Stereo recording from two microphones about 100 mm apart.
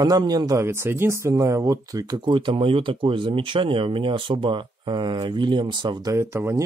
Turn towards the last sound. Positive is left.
turn(degrees=-25)  # may be behind; listen again after turning